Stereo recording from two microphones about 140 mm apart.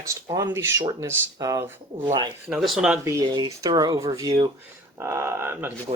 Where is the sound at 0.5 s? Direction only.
15° right (ahead or behind).